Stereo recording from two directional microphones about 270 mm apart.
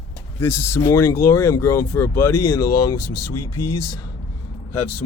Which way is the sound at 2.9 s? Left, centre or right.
Left.